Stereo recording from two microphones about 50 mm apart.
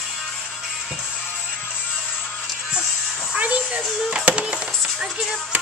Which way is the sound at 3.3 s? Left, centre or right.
Right.